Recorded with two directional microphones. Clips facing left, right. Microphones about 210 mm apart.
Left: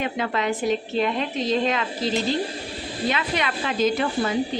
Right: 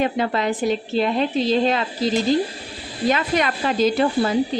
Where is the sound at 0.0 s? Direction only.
35° right (ahead or behind).